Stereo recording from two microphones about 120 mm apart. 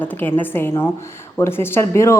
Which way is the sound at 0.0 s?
15° left (ahead or behind).